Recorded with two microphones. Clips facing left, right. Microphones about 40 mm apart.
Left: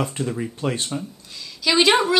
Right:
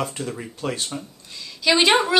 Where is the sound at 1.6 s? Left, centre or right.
Centre.